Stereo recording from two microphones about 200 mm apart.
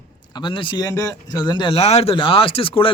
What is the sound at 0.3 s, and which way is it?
Speech, 25° left (ahead or behind).